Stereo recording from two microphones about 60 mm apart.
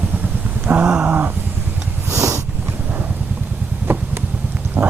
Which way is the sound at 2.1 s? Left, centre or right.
Right.